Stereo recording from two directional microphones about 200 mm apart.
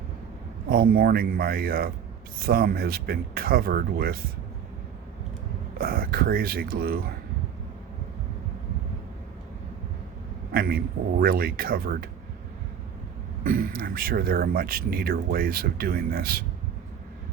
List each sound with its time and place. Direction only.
0.7 s speech: 45° right (ahead or behind)
5.8 s speech: 50° right (ahead or behind)
10.5 s a man's voice: 50° right (ahead or behind)
13.4 s speech: 45° right (ahead or behind)